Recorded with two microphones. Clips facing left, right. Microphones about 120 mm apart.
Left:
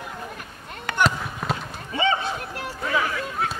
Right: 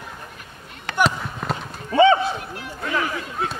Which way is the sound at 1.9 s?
50° right (ahead or behind).